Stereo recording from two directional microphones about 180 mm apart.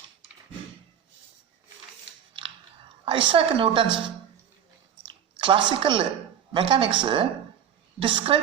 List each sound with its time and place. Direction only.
3.0 s a woman's voice: 30° right (ahead or behind)
5.0 s a sound: 25° right (ahead or behind)
6.5 s a woman's voice: 30° right (ahead or behind)